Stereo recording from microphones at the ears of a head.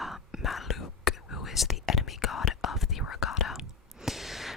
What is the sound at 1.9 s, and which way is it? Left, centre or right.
Whispering, left.